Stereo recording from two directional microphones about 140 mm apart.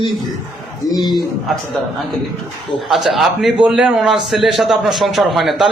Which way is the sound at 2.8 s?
Centre (ahead or behind).